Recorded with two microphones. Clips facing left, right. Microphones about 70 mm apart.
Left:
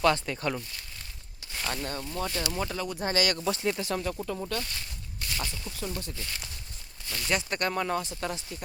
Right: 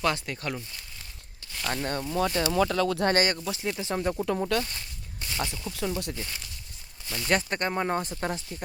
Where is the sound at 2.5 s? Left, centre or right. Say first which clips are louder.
Right 8 dB; right.